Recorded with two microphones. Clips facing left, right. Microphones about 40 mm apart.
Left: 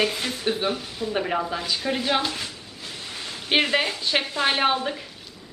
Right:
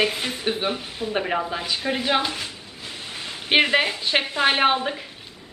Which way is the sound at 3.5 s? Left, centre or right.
Centre.